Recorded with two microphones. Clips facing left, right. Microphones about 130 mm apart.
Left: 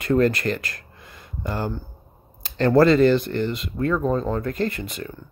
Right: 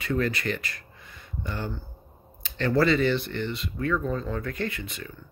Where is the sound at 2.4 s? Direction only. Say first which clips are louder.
Left 7 dB; 40° left (ahead or behind).